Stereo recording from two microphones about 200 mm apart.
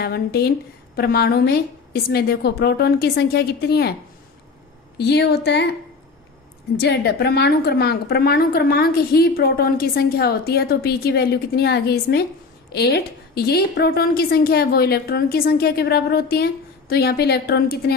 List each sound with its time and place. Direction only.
0.0 s a woman's voice: 50° left (ahead or behind)
4.9 s a woman's voice: 55° left (ahead or behind)
6.7 s a woman's voice: 55° left (ahead or behind)